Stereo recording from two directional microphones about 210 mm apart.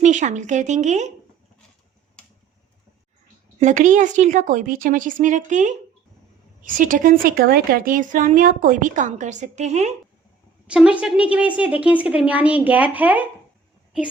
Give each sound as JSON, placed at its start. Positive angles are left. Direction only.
{"t": 0.0, "sound": "a woman's voice", "side_deg": -35}
{"t": 3.6, "sound": "a woman's voice", "side_deg": -35}
{"t": 10.7, "sound": "a woman's voice", "side_deg": -5}